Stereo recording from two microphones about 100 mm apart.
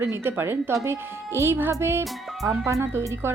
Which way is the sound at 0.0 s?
25° right (ahead or behind).